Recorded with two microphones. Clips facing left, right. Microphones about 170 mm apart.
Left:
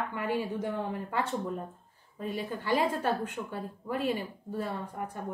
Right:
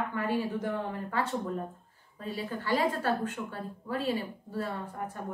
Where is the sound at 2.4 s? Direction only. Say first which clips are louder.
Even; 15° left (ahead or behind).